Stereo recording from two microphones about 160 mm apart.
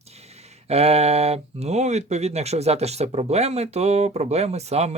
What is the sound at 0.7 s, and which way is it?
Speech, 40° right (ahead or behind).